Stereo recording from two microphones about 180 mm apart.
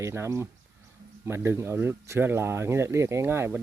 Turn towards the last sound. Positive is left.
turn(degrees=-15)  # may be behind; listen again after turning